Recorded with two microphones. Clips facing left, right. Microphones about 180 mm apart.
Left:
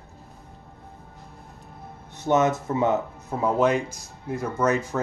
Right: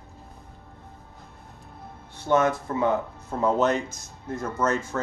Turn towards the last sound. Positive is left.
turn(degrees=15)  # may be behind; listen again after turning